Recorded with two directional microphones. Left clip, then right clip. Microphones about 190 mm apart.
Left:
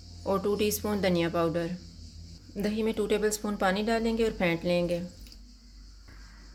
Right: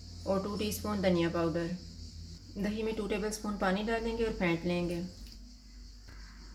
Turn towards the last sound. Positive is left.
turn(degrees=50)  # may be behind; listen again after turning